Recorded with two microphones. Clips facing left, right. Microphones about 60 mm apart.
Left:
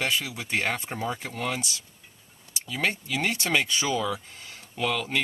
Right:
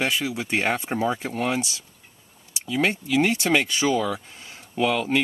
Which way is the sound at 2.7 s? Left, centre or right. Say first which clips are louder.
Right 6 dB; right.